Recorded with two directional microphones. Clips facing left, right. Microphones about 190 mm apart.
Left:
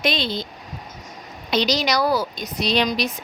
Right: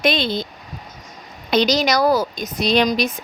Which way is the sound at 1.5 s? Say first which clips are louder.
Right 4 dB; 50° right (ahead or behind).